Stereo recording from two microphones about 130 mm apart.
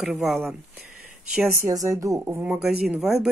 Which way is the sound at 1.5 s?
25° right (ahead or behind).